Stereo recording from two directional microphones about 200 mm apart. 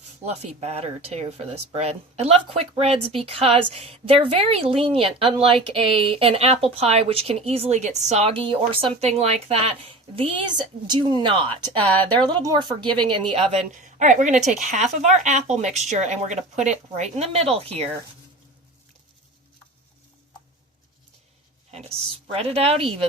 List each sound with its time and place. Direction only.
0.3 s a woman's voice: 30° right (ahead or behind)
13.5 s speech: 40° right (ahead or behind)
22.3 s a woman's voice: 30° right (ahead or behind)